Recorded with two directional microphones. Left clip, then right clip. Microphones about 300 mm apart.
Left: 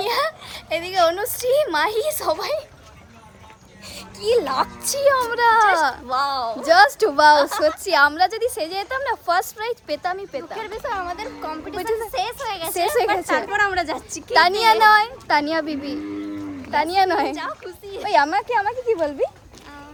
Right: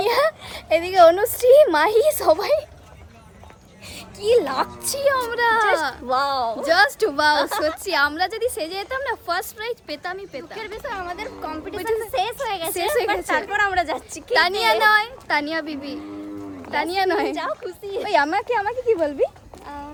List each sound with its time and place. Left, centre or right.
0.0 s a woman's voice: right
4.3 s speech: centre
6.1 s speech: centre
6.5 s speech: centre
12.5 s speech: centre
12.9 s speech: centre
17.4 s speech: centre